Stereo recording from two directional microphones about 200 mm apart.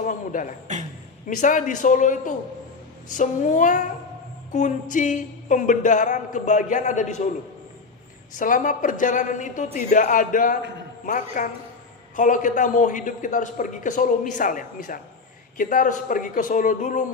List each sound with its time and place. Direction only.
0.1 s a sound: 40° left (ahead or behind)
1.3 s a man's voice: 40° left (ahead or behind)
8.4 s a man's voice: 40° left (ahead or behind)